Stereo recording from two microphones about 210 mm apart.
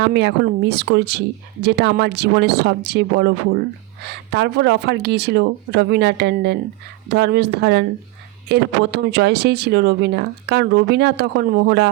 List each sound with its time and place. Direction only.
0.0 s speech: 55° right (ahead or behind)